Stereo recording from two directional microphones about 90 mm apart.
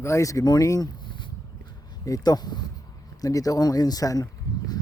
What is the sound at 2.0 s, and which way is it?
Speech, 45° left (ahead or behind).